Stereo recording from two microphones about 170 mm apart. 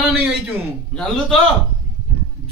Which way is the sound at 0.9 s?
Centre (ahead or behind).